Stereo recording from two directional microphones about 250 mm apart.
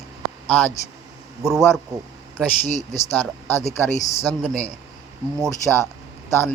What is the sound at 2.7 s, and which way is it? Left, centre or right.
Speech, left.